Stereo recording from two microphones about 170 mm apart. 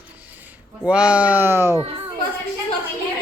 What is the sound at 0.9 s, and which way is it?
Speech, 5° right (ahead or behind).